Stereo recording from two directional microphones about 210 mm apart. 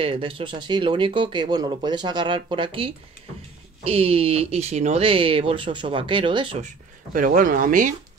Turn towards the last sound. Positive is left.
turn(degrees=-40)  # may be behind; listen again after turning